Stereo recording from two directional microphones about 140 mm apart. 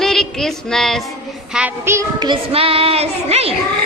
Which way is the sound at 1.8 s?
20° right (ahead or behind).